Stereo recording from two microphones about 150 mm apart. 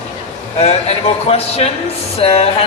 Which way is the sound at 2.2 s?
40° left (ahead or behind).